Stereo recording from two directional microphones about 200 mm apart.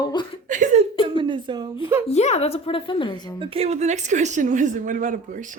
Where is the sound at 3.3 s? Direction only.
30° right (ahead or behind).